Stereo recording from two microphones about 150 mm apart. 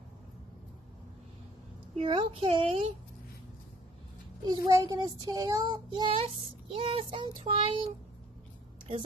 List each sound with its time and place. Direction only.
2.0 s child singing: 35° right (ahead or behind)
4.5 s child singing: 25° right (ahead or behind)
8.9 s speech: 45° right (ahead or behind)